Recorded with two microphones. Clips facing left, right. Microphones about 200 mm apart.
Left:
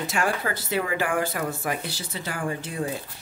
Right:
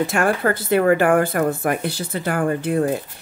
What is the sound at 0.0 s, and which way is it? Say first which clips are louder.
Speech: right 7 dB; 55° right (ahead or behind).